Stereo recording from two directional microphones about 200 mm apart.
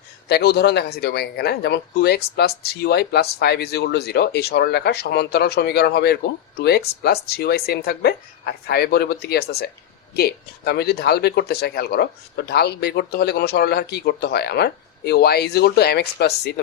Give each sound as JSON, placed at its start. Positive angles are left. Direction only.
{"t": 0.3, "sound": "speech", "side_deg": 55}